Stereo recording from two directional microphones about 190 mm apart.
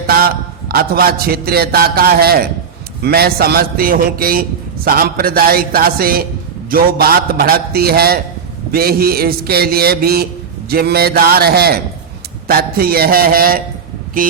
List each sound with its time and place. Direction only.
0.1 s a man's voice: 55° right (ahead or behind)